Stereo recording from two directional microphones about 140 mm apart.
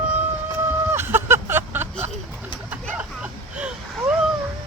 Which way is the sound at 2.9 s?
10° right (ahead or behind).